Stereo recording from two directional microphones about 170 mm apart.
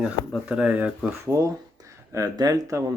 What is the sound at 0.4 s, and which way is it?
Speech, 5° right (ahead or behind).